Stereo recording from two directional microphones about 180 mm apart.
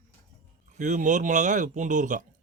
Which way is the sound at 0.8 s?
45° right (ahead or behind).